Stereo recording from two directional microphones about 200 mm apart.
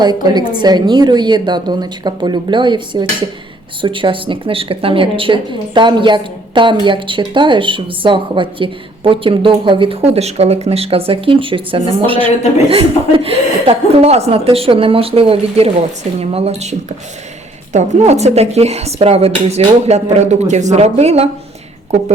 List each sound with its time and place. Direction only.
0.0 s speech: 20° right (ahead or behind)